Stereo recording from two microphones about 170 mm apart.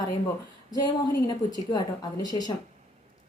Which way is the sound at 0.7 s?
25° left (ahead or behind).